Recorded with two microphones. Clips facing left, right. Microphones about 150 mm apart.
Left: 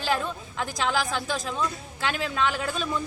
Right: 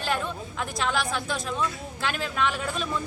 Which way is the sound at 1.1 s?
Centre (ahead or behind).